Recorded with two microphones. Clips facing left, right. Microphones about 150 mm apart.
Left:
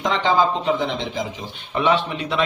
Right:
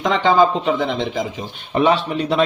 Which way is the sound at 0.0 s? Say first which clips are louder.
Right 4 dB; 55° right (ahead or behind).